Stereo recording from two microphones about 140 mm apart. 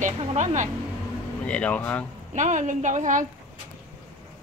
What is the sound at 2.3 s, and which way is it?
Speech, 60° right (ahead or behind).